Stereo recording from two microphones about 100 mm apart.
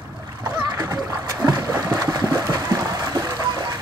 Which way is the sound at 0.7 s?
40° right (ahead or behind).